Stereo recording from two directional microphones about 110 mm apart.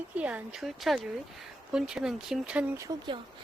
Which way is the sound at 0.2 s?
10° right (ahead or behind).